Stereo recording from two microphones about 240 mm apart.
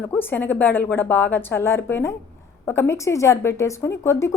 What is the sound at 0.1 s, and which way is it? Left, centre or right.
A woman's voice, centre.